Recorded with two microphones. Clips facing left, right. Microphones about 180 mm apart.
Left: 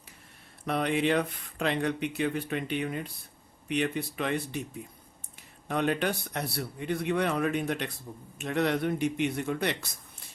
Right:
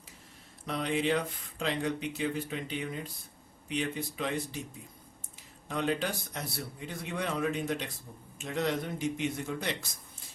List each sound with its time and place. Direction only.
0.6 s a man's voice: 60° left (ahead or behind)